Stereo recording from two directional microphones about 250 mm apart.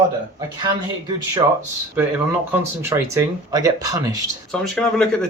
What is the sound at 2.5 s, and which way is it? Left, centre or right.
Speech, centre.